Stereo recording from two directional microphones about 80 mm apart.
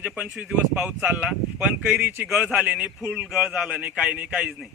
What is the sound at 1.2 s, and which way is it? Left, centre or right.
Speech, centre.